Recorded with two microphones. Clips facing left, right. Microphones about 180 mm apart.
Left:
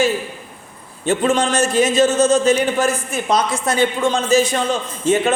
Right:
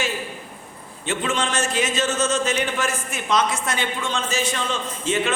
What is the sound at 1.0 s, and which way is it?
A man's voice, 40° left (ahead or behind).